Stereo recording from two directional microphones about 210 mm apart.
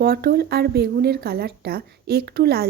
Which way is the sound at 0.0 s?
45° right (ahead or behind).